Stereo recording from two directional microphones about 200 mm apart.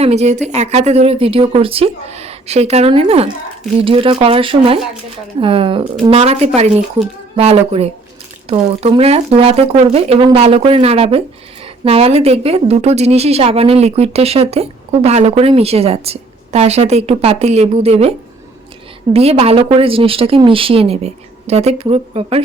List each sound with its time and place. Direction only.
0.0 s a woman's voice: 30° right (ahead or behind)
19.1 s a woman's voice: 30° right (ahead or behind)